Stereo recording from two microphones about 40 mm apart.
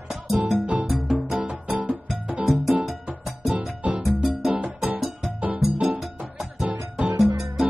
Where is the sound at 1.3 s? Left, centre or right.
Right.